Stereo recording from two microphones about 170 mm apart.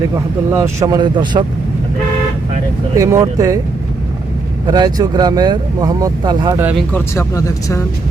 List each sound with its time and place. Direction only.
0.5 s speech: 20° right (ahead or behind)
2.9 s speech: 20° right (ahead or behind)
4.6 s speech: 25° right (ahead or behind)
7.2 s speech: 20° left (ahead or behind)